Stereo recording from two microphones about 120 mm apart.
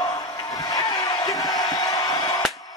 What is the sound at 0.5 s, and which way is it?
Crowd, 30° left (ahead or behind).